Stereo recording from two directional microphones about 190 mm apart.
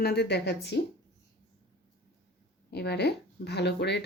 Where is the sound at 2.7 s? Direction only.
60° left (ahead or behind).